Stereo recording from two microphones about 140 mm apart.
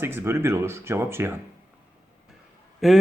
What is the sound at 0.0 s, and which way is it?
Speech, 15° right (ahead or behind).